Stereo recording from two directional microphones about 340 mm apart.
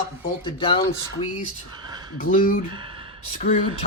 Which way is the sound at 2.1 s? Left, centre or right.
Left.